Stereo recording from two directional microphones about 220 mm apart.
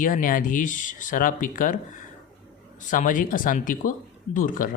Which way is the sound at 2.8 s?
35° left (ahead or behind).